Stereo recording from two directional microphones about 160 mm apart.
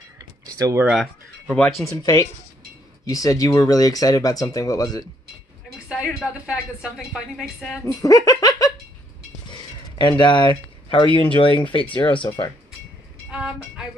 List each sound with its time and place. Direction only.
0.5 s speech: 20° right (ahead or behind)
1.5 s speech: 10° left (ahead or behind)
3.1 s speech: 20° left (ahead or behind)
5.7 s a woman's voice: centre (ahead or behind)
7.8 s giggle: 20° left (ahead or behind)
9.5 s a sound: 25° left (ahead or behind)
11.2 s speech: 30° left (ahead or behind)
13.3 s music: 10° right (ahead or behind)